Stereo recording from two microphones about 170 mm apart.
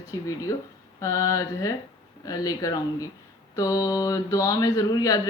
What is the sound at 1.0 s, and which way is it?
Speech, 20° left (ahead or behind).